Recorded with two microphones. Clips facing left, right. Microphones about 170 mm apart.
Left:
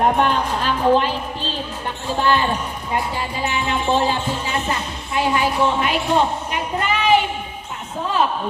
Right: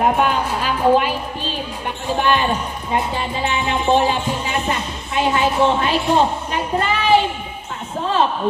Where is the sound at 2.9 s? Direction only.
25° right (ahead or behind).